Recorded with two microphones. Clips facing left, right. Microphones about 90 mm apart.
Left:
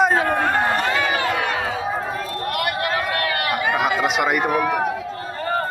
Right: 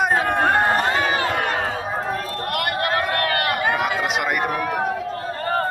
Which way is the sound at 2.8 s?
45° right (ahead or behind).